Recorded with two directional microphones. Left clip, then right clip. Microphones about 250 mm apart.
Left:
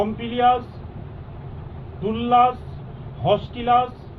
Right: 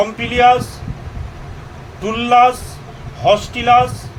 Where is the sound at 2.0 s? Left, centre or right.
Right.